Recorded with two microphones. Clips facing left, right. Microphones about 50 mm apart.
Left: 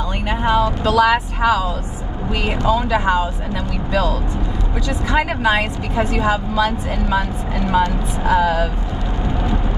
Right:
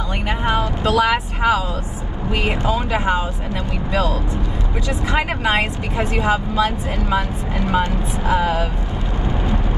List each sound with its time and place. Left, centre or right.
0.5 s speech: right
4.8 s speech: right